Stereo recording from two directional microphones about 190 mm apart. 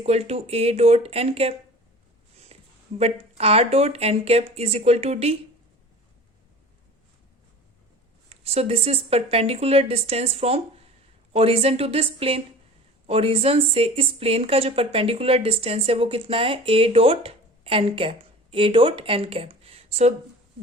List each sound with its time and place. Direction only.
0.0 s speech: 35° right (ahead or behind)
2.5 s a sound: 35° right (ahead or behind)
3.0 s speech: 30° right (ahead or behind)
8.3 s a woman's voice: 35° right (ahead or behind)